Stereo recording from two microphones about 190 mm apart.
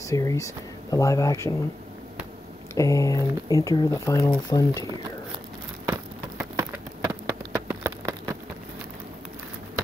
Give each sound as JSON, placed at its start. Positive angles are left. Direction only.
{"t": 0.0, "sound": "speech", "side_deg": 15}
{"t": 2.7, "sound": "speech", "side_deg": 15}
{"t": 5.9, "sound": "a sound", "side_deg": -10}